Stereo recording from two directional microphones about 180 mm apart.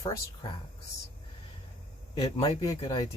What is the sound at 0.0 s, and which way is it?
Speech, 25° left (ahead or behind).